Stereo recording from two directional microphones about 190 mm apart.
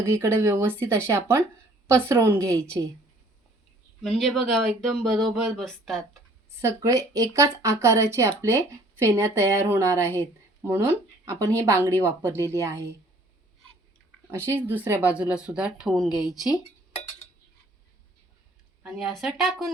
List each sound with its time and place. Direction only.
0.0 s speech: 15° right (ahead or behind)
4.0 s speech: centre (ahead or behind)
6.6 s speech: 15° right (ahead or behind)
10.1 s a sound: 10° left (ahead or behind)
10.7 s speech: 15° right (ahead or behind)
14.3 s speech: 10° right (ahead or behind)
18.8 s speech: 5° right (ahead or behind)